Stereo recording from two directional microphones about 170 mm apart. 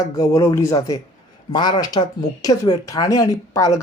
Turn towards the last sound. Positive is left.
turn(degrees=20)  # may be behind; listen again after turning